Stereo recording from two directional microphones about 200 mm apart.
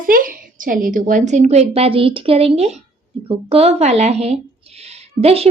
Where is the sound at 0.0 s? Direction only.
45° right (ahead or behind).